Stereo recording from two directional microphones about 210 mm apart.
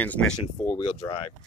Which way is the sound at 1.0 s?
20° left (ahead or behind).